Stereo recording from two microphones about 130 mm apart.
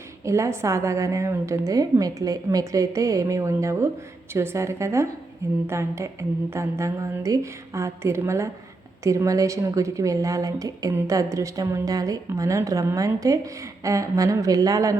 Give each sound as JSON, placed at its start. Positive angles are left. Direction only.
{"t": 0.3, "sound": "a woman's voice", "side_deg": -20}